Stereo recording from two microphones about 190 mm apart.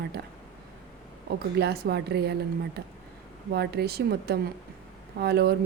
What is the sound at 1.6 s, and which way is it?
A woman's voice, 55° right (ahead or behind).